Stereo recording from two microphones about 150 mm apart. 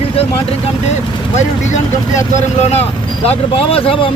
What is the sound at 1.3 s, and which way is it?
Speech, 55° left (ahead or behind).